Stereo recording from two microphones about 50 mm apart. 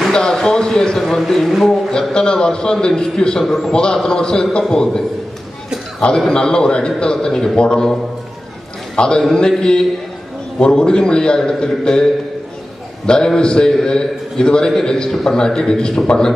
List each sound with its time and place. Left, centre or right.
0.2 s a man's voice: centre
1.9 s a man's voice: centre
8.9 s a man's voice: centre